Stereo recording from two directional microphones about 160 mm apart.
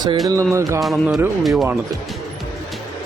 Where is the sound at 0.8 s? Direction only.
Centre (ahead or behind).